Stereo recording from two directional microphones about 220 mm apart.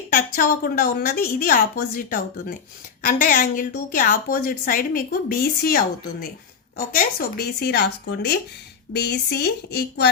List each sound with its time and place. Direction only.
0.1 s a woman's voice: 40° left (ahead or behind)